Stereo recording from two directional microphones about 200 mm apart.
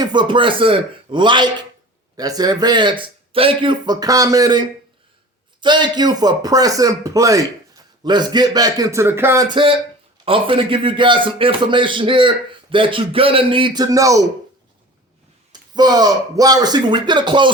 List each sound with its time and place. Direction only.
0.0 s a man's voice: 20° right (ahead or behind)
15.5 s a man's voice: 20° right (ahead or behind)